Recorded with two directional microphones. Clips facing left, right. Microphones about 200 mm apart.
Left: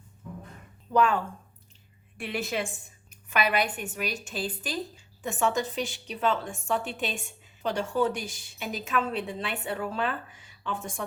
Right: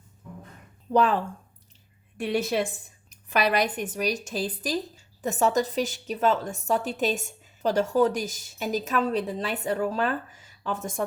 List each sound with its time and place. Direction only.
0.9 s a woman's voice: 35° right (ahead or behind)